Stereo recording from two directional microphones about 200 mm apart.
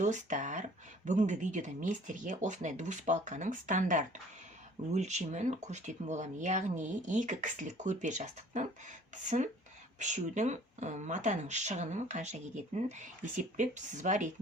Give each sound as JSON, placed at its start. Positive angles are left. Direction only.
{"t": 0.0, "sound": "speech", "side_deg": -40}
{"t": 10.0, "sound": "speech", "side_deg": -35}